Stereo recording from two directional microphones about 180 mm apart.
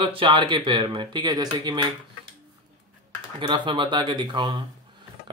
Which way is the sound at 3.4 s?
25° right (ahead or behind).